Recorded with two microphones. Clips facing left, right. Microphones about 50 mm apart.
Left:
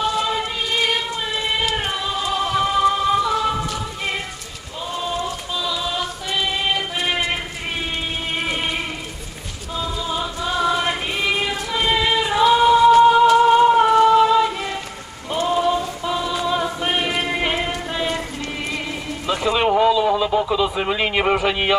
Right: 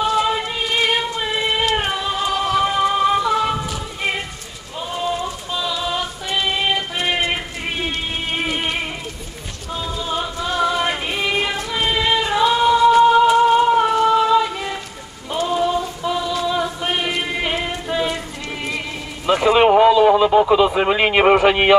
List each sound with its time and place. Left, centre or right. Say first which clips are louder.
0.0 s music: right 3 dB; centre
2.0 s music: right 2 dB; centre
2.3 s music: right 2 dB; centre
2.6 s music: left 3 dB; centre
3.2 s siren: right 1 dB; centre
3.5 s music: even; centre
5.5 s music: right 3 dB; centre
10.4 s music: even; centre
15.4 s a sound: even; centre
16.3 s music: even; centre
16.8 s a sound: even; centre
19.2 s a sound: right 6 dB; right